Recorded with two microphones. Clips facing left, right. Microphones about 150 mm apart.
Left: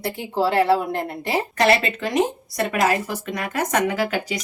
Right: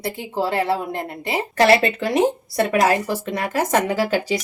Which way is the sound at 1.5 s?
30° right (ahead or behind).